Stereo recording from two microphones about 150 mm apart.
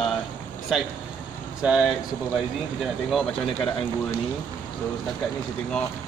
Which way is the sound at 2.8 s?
Centre (ahead or behind).